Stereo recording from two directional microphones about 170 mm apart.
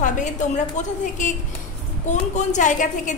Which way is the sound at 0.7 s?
45° left (ahead or behind).